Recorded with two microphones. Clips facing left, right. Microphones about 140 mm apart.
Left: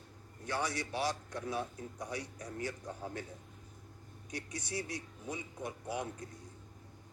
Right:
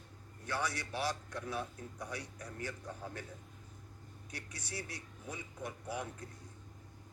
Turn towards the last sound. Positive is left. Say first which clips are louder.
# left 2 dB
turn(degrees=15)  # may be behind; listen again after turning